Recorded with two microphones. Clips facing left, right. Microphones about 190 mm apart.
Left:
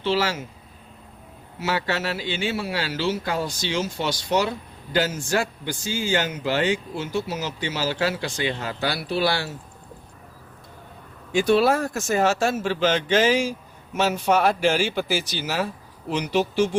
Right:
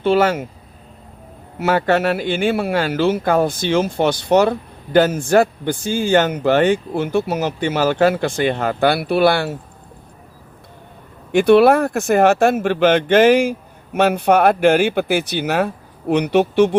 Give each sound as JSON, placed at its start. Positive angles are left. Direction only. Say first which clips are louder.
{"t": 0.0, "sound": "speech", "louder": "right 8 dB", "side_deg": -55}
{"t": 1.5, "sound": "speech", "louder": "right 9 dB", "side_deg": -55}
{"t": 11.3, "sound": "speech", "louder": "right 8 dB", "side_deg": -60}